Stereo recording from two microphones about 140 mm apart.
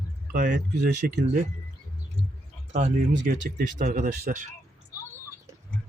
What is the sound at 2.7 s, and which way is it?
Speech, 55° right (ahead or behind).